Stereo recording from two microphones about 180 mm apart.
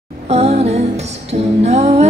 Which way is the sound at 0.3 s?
35° right (ahead or behind).